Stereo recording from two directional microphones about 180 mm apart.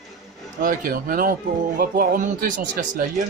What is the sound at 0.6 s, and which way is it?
Speech, 50° right (ahead or behind).